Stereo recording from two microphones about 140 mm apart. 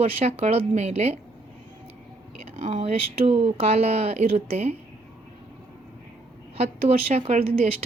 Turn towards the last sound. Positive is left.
turn(degrees=-45)  # may be behind; listen again after turning